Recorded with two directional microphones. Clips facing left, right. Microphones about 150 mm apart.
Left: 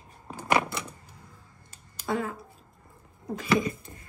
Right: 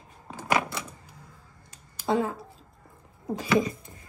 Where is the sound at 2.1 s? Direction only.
25° right (ahead or behind).